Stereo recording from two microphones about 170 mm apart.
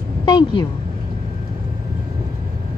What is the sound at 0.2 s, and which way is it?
Speech, 25° left (ahead or behind).